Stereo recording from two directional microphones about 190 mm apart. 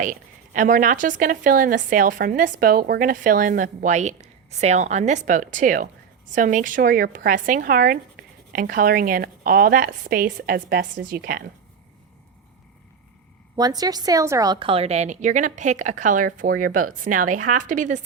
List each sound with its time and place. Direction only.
0.0 s speech: 40° right (ahead or behind)
13.6 s a woman's voice: 20° right (ahead or behind); by 18.0 s 40° right (ahead or behind)